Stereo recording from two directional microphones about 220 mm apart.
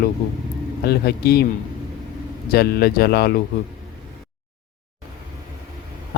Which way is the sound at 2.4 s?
45° left (ahead or behind).